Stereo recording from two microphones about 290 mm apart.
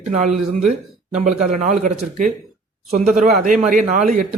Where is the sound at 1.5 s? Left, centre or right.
Right.